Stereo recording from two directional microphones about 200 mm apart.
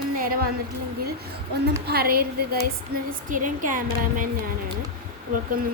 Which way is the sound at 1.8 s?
50° right (ahead or behind).